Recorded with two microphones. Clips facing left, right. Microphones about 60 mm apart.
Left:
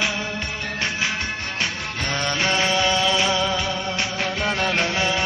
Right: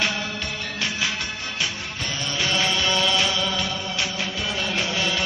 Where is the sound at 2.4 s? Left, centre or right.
Left.